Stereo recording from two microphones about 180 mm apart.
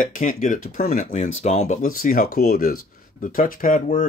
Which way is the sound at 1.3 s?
35° left (ahead or behind).